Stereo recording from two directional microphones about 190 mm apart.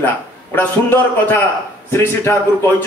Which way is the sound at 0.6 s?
10° left (ahead or behind).